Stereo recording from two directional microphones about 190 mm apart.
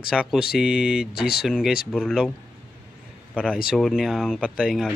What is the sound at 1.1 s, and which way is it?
Speech, 55° left (ahead or behind).